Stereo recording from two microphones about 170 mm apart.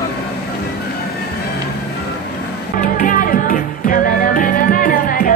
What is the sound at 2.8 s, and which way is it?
Music, 50° left (ahead or behind).